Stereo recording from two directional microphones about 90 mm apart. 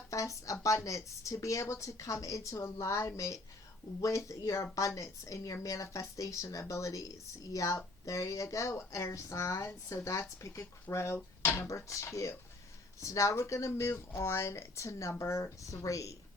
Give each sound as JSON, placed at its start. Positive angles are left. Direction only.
{"t": 0.1, "sound": "a woman's voice", "side_deg": 35}